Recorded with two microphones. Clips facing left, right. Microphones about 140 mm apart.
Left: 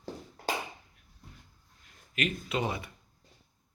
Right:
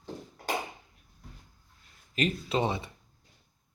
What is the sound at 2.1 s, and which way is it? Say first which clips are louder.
Speech: right 3 dB; 30° right (ahead or behind).